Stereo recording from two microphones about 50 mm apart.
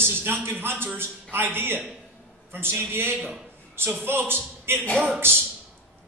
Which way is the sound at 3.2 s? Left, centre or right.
Right.